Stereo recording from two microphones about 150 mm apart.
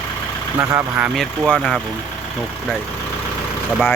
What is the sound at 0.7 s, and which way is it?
Speech, 15° right (ahead or behind).